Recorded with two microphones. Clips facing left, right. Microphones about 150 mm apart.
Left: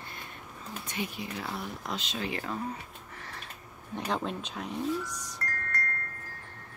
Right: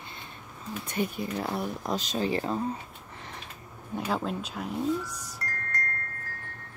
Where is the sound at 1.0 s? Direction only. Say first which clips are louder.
Right 6 dB; 45° right (ahead or behind).